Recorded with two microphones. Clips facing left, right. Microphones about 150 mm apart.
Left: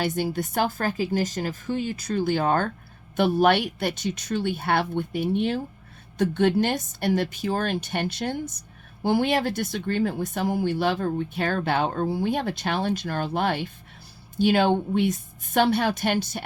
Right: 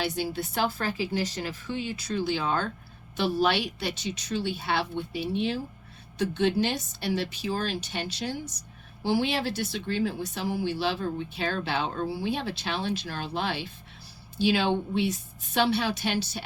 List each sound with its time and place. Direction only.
0.0 s speech: 50° left (ahead or behind)